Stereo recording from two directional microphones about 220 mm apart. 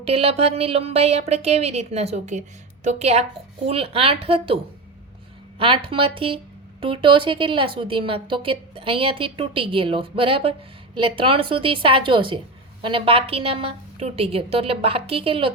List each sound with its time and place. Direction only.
0.0 s speech: 25° right (ahead or behind)